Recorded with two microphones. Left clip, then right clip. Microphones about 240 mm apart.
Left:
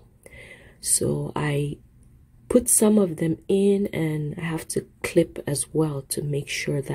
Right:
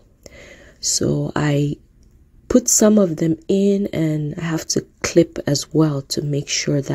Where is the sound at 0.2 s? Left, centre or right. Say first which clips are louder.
Right 3 dB; right.